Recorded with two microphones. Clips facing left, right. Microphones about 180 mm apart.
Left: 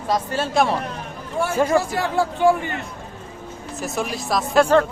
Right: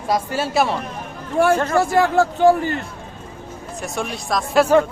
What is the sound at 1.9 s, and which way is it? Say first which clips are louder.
Speech: right 5 dB; 45° right (ahead or behind).